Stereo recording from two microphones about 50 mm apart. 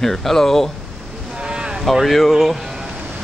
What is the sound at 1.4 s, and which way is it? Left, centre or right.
Boat, centre.